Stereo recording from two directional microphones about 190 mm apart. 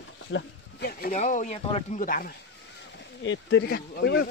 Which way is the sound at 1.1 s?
40° left (ahead or behind).